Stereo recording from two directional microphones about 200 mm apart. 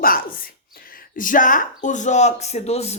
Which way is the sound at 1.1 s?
40° left (ahead or behind).